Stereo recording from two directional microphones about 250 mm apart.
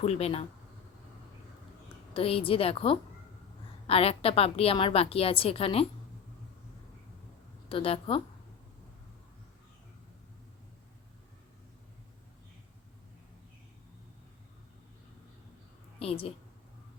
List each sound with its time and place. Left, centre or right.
0.0 s a woman's voice: left
2.1 s a woman's voice: left
7.7 s a woman's voice: left
16.0 s a woman's voice: left